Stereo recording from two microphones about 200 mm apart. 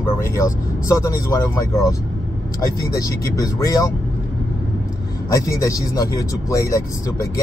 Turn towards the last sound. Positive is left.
turn(degrees=15)  # may be behind; listen again after turning